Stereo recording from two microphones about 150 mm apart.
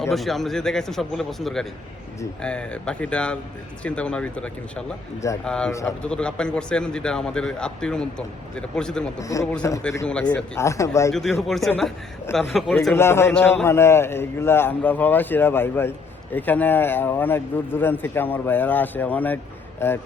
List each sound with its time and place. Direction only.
0.1 s a man's voice: centre (ahead or behind)
9.2 s speech: 20° left (ahead or behind)
10.1 s speech: 10° left (ahead or behind)
11.1 s a man's voice: centre (ahead or behind)
12.9 s a man's voice: 15° left (ahead or behind)